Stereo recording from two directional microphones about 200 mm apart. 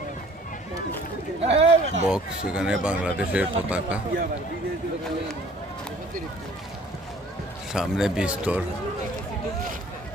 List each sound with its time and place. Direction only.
1.4 s a sound: 30° right (ahead or behind)
2.0 s speech: 5° right (ahead or behind)
7.7 s speech: 5° right (ahead or behind)